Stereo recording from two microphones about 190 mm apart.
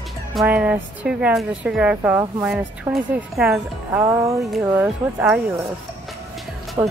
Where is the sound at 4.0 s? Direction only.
15° right (ahead or behind).